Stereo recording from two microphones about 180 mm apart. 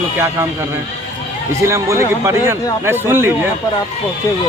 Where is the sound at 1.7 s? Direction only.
15° right (ahead or behind).